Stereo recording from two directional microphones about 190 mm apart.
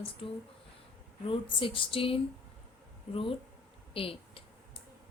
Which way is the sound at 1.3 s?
30° left (ahead or behind).